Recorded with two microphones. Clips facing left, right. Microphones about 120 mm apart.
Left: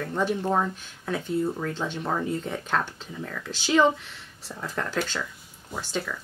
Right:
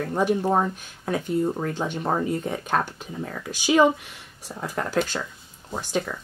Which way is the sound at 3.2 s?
25° right (ahead or behind).